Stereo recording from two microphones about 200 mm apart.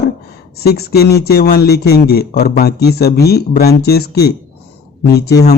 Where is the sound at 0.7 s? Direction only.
50° left (ahead or behind).